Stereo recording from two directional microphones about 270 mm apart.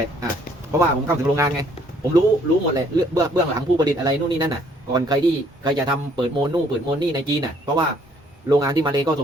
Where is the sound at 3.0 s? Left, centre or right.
Centre.